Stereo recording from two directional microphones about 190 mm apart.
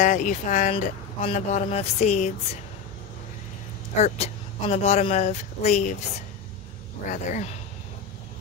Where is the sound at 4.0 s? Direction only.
35° left (ahead or behind).